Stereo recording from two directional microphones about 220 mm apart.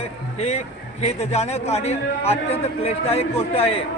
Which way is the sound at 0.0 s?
30° left (ahead or behind).